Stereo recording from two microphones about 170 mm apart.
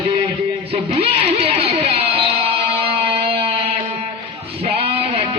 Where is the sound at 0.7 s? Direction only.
35° right (ahead or behind).